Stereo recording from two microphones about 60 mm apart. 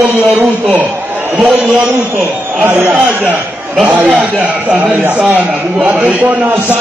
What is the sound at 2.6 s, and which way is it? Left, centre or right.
A man's voice, right.